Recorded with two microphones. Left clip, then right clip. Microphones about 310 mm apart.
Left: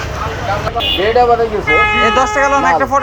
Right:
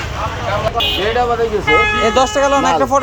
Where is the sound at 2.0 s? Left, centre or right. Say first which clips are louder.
Left 2 dB; centre.